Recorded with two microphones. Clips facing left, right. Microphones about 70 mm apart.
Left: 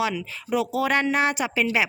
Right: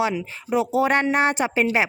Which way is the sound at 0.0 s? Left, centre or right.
Right.